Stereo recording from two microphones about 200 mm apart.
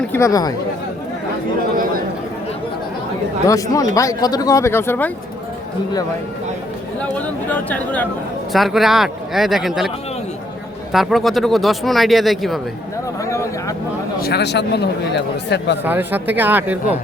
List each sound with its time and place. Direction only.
0.1 s speech: 15° left (ahead or behind)
3.4 s speech: 15° left (ahead or behind)
7.0 s speech: 5° left (ahead or behind)
10.9 s speech: centre (ahead or behind)
14.2 s speech: 55° left (ahead or behind)
15.8 s speech: 10° right (ahead or behind)